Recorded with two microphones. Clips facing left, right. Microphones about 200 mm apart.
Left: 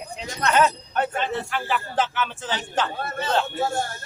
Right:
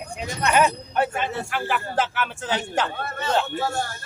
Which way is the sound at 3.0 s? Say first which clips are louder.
Even; 30° left (ahead or behind).